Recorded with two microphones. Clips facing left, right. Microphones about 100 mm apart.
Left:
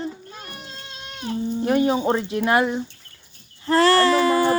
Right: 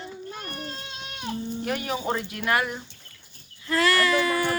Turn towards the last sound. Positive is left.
turn(degrees=30)  # may be behind; listen again after turning